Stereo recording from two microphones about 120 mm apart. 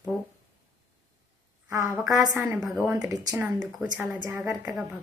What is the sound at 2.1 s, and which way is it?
Speech, 30° right (ahead or behind).